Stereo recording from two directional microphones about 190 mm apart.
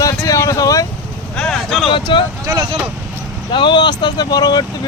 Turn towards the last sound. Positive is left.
turn(degrees=20)  # may be behind; listen again after turning